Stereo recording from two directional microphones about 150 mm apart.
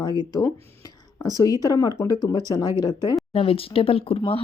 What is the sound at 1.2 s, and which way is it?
Speech, 25° left (ahead or behind).